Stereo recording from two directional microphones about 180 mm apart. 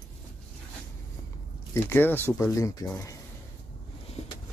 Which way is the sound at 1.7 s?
10° left (ahead or behind).